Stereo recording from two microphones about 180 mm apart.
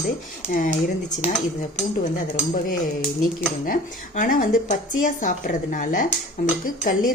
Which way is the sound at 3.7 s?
50° left (ahead or behind).